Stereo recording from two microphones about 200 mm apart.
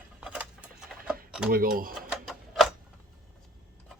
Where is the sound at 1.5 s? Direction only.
45° right (ahead or behind).